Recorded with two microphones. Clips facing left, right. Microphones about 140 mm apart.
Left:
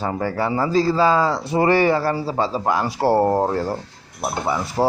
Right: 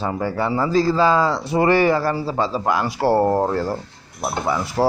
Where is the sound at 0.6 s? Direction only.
35° left (ahead or behind).